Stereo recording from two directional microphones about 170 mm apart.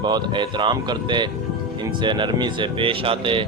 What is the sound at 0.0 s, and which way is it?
Speech, 25° right (ahead or behind).